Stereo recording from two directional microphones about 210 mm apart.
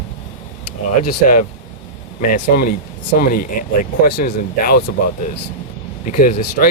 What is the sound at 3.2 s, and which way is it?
Speech, 45° left (ahead or behind).